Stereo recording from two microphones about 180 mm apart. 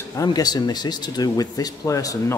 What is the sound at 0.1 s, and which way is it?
Speech, 20° left (ahead or behind).